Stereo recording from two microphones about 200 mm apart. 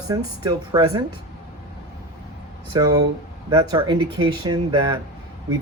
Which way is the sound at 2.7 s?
20° right (ahead or behind).